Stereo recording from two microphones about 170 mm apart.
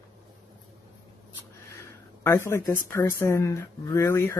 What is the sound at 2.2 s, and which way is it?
Speech, 15° left (ahead or behind).